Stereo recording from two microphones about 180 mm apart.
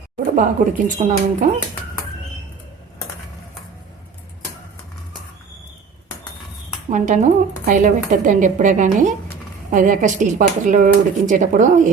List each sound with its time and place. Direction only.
0.3 s speech: 45° right (ahead or behind)
6.9 s speech: 45° right (ahead or behind)